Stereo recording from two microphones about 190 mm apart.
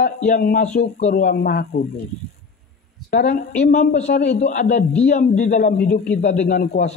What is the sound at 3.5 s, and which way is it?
A man's voice, 35° left (ahead or behind).